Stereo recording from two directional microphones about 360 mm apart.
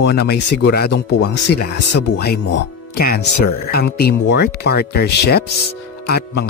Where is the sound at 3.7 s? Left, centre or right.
Left.